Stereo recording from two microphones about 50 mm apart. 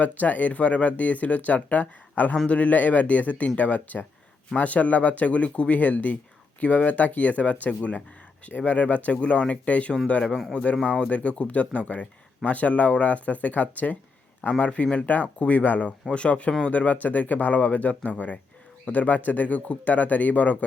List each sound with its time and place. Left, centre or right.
0.0 s speech: left
10.2 s a man's voice: centre
10.5 s speech: left